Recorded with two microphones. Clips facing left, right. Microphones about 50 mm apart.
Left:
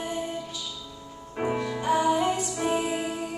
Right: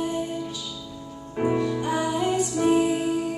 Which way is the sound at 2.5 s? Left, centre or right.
Centre.